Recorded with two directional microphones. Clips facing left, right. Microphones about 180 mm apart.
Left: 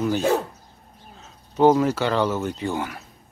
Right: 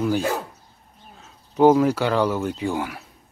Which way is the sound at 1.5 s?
5° right (ahead or behind).